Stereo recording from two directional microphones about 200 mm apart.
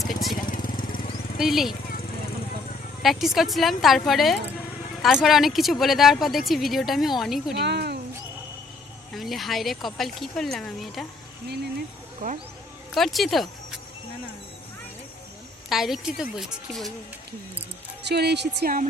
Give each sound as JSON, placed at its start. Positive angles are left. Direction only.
{"t": 0.0, "sound": "speech", "side_deg": 0}
{"t": 0.4, "sound": "vehicle", "side_deg": 45}
{"t": 1.4, "sound": "a woman's voice", "side_deg": 0}
{"t": 3.0, "sound": "a woman's voice", "side_deg": 0}
{"t": 7.6, "sound": "speech", "side_deg": -55}
{"t": 9.1, "sound": "a woman's voice", "side_deg": 0}
{"t": 12.2, "sound": "speech", "side_deg": -45}
{"t": 12.9, "sound": "speech", "side_deg": 0}
{"t": 15.7, "sound": "a woman's voice", "side_deg": 0}
{"t": 18.1, "sound": "a woman's voice", "side_deg": -55}